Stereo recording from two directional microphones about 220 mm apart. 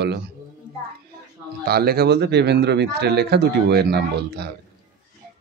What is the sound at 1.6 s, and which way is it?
Speech, 45° right (ahead or behind).